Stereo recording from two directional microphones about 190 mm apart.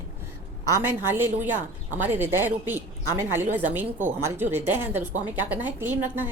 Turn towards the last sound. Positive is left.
turn(degrees=-10)  # may be behind; listen again after turning